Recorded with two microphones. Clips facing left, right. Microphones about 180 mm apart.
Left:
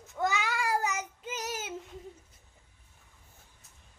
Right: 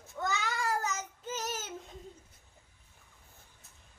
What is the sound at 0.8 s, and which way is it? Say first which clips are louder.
Child singing: left 3 dB; 15° left (ahead or behind).